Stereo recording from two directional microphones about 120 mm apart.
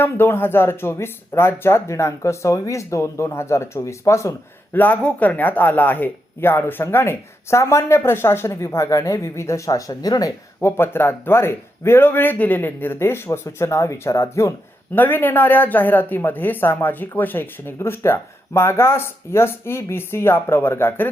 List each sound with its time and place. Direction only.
0.0 s speech: 20° left (ahead or behind)